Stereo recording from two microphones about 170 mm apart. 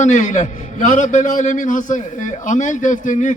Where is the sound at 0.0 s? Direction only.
45° left (ahead or behind).